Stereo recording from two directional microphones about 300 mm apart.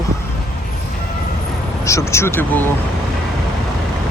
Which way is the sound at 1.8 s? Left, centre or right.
Centre.